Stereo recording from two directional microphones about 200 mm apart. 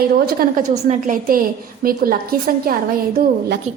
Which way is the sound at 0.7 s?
35° right (ahead or behind).